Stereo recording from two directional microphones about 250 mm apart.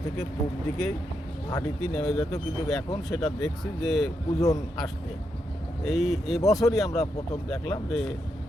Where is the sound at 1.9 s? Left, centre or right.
Centre.